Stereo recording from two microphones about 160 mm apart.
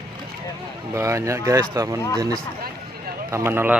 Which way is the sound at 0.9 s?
20° right (ahead or behind).